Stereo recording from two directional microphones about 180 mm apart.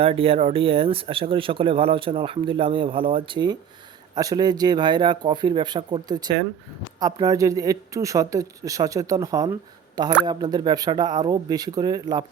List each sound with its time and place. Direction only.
0.0 s a woman's voice: 30° right (ahead or behind)